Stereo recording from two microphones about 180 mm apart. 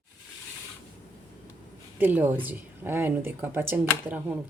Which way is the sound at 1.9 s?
10° right (ahead or behind).